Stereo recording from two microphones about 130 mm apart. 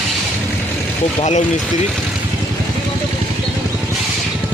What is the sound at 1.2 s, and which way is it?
Speech, 60° left (ahead or behind).